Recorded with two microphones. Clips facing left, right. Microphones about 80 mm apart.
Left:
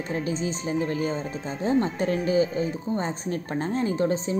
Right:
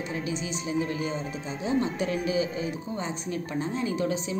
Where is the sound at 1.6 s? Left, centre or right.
Left.